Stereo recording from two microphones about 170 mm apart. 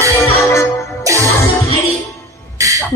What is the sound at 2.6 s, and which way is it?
Music, 20° right (ahead or behind).